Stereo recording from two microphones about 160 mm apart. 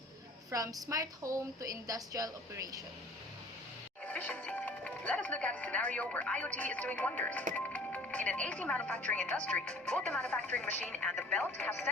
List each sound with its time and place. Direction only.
0.5 s a woman's voice: 20° right (ahead or behind)
4.0 s speech: 10° left (ahead or behind)